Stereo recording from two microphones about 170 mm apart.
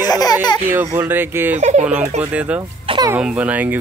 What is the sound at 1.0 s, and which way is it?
Speech, 15° right (ahead or behind).